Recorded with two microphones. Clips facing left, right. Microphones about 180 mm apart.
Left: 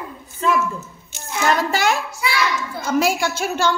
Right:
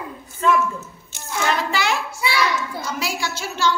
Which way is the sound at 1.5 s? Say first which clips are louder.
Left 4 dB; 45° left (ahead or behind).